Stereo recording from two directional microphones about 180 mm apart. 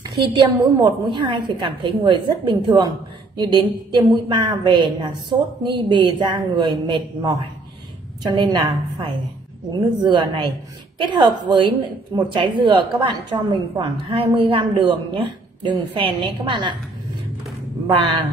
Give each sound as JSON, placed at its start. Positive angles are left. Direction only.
{"t": 0.0, "sound": "a woman's voice", "side_deg": -25}
{"t": 9.8, "sound": "a woman's voice", "side_deg": -25}
{"t": 17.8, "sound": "a woman's voice", "side_deg": -25}